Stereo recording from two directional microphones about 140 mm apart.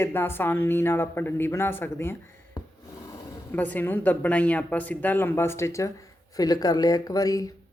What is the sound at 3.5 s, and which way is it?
Speech, 10° left (ahead or behind).